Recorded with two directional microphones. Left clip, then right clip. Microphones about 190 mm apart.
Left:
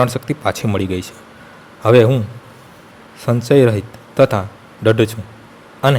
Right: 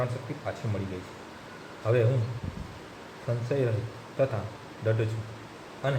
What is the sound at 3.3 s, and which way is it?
Speech, 70° left (ahead or behind).